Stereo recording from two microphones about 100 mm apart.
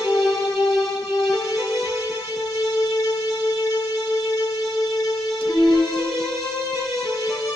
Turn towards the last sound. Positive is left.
turn(degrees=45)  # may be behind; listen again after turning